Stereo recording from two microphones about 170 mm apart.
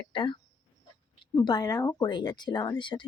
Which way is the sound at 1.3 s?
20° left (ahead or behind).